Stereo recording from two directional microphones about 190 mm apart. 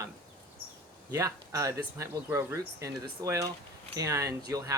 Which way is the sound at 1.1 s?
15° right (ahead or behind).